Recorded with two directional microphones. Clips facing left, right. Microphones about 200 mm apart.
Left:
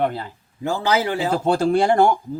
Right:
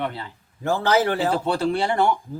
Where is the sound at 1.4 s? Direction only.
45° left (ahead or behind).